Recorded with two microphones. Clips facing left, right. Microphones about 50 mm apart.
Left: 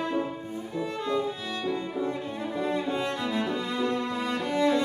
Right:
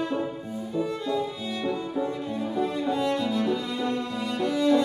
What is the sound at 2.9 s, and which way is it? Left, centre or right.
Music, left.